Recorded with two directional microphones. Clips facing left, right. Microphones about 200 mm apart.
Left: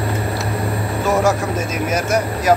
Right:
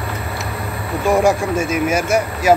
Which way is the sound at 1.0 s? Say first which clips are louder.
Right 3 dB; 15° right (ahead or behind).